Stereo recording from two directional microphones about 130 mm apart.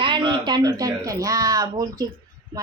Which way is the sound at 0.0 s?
35° right (ahead or behind).